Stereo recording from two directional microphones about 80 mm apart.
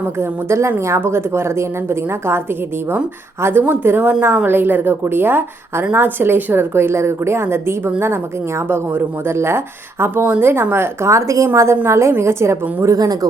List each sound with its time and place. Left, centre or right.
0.2 s a woman's voice: right
12.8 s speech: right